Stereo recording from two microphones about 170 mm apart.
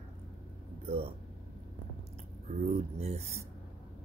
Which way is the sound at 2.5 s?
40° right (ahead or behind).